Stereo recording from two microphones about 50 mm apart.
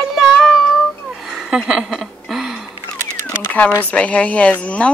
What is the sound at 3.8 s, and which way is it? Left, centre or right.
Speech, left.